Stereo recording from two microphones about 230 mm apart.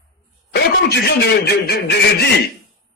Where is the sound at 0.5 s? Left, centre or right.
Left.